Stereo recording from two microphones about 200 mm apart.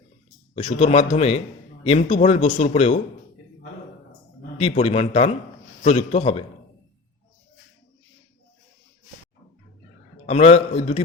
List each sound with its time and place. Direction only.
0.5 s speech: 35° left (ahead or behind)
4.5 s speech: 35° left (ahead or behind)
10.2 s speech: 30° left (ahead or behind)